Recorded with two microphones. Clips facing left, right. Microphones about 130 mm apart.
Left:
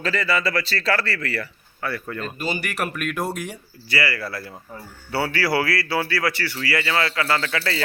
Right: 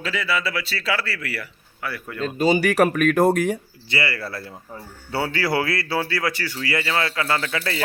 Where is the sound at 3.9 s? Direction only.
25° right (ahead or behind).